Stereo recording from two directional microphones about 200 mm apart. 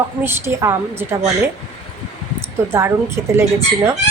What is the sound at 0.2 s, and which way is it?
Speech, 10° right (ahead or behind).